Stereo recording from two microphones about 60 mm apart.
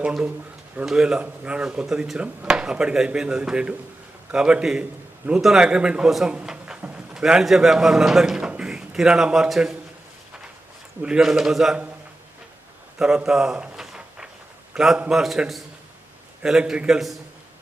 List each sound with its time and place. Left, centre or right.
0.0 s a man's voice: centre
5.4 s a man's voice: centre
5.6 s a man's voice: centre
11.0 s speech: centre
13.0 s a sound: centre
15.1 s a man's voice: centre
16.4 s speech: centre